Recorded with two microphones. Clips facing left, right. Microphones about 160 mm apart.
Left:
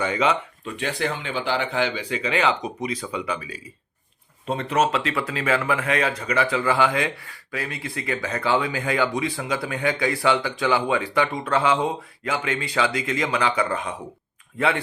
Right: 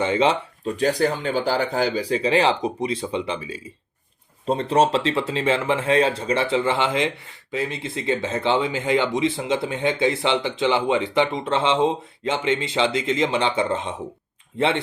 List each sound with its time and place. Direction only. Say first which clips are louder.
0.0 s speech: right 3 dB; 30° right (ahead or behind)